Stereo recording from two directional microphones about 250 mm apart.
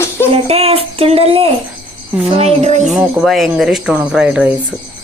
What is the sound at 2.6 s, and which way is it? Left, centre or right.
Speech, right.